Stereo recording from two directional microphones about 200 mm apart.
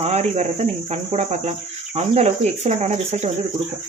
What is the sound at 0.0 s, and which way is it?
Cricket, 30° right (ahead or behind).